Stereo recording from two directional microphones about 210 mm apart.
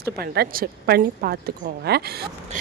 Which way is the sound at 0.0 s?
50° right (ahead or behind).